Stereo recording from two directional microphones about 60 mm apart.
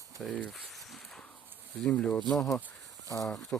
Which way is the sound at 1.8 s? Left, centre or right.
Centre.